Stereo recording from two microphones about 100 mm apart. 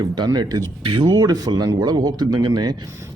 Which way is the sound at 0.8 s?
60° right (ahead or behind).